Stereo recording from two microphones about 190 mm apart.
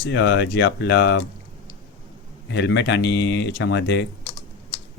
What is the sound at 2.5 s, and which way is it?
Speech, 65° left (ahead or behind).